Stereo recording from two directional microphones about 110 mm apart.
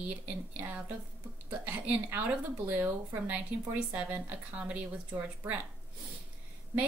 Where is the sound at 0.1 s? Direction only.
15° right (ahead or behind).